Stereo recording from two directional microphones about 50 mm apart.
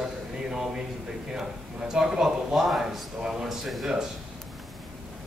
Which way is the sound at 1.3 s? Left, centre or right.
Centre.